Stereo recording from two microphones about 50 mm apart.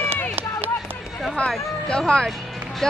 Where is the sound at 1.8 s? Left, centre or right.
Centre.